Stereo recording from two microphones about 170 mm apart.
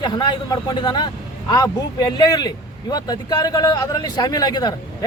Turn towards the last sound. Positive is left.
turn(degrees=25)  # may be behind; listen again after turning